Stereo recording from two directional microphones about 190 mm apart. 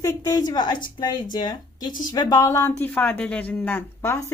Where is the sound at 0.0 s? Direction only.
20° left (ahead or behind).